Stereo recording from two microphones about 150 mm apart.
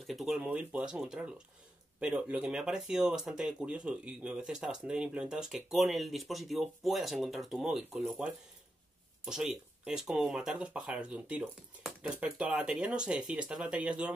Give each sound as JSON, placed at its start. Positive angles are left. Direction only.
{"t": 0.0, "sound": "speech", "side_deg": 0}